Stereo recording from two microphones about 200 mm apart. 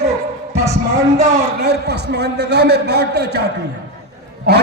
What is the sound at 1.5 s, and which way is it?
A man's voice, 55° right (ahead or behind).